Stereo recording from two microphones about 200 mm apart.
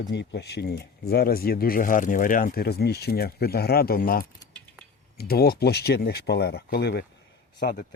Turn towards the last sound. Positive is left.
turn(degrees=50)  # may be behind; listen again after turning